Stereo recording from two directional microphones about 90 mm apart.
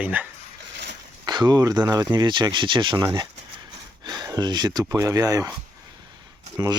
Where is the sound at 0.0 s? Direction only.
20° right (ahead or behind).